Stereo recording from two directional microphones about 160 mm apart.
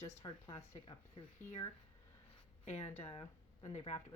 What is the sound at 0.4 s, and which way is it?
Speech, 30° left (ahead or behind).